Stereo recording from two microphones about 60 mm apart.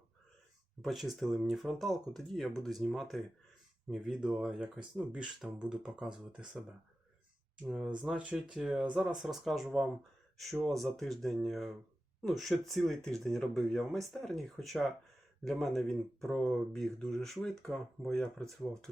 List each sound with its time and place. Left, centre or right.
0.8 s speech: centre
7.6 s speech: centre
9.0 s speech: centre